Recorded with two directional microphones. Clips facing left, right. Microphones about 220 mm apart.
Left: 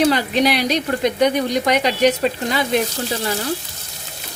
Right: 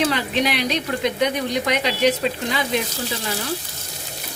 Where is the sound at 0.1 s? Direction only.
40° left (ahead or behind).